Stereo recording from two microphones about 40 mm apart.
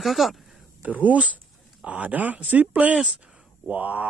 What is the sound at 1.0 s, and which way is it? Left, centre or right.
Speech, right.